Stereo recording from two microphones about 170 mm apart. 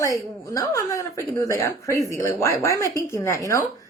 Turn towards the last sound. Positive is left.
turn(degrees=20)  # may be behind; listen again after turning